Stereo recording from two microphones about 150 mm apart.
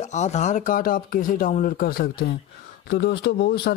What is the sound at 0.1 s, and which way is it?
Speech, 50° left (ahead or behind).